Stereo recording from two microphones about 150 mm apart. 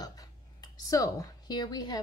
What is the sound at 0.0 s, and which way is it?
Speech, 25° left (ahead or behind).